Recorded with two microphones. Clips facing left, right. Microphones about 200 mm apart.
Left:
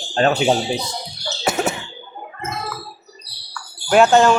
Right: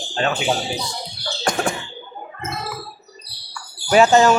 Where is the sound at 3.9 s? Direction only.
Centre (ahead or behind).